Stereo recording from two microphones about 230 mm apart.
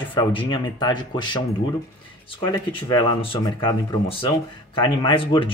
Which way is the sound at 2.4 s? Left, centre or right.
Left.